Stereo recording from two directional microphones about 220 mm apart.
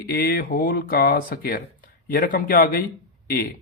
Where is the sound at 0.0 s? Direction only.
45° left (ahead or behind).